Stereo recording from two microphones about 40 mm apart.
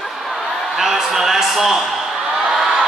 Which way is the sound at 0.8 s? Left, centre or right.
Centre.